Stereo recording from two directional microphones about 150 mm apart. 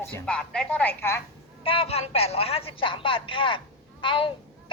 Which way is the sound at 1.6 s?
40° left (ahead or behind).